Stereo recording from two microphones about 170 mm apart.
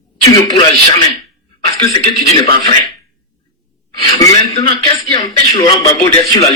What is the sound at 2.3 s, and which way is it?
Speech, 30° left (ahead or behind).